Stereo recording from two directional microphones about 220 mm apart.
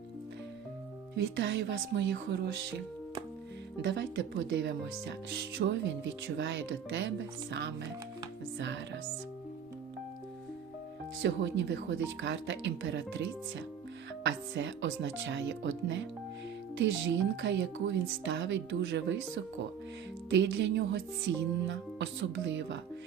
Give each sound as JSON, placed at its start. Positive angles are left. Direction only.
{"t": 1.1, "sound": "speech", "side_deg": -55}
{"t": 3.8, "sound": "speech", "side_deg": -50}
{"t": 8.5, "sound": "music", "side_deg": -55}
{"t": 11.2, "sound": "speech", "side_deg": -55}
{"t": 20.3, "sound": "speech", "side_deg": -55}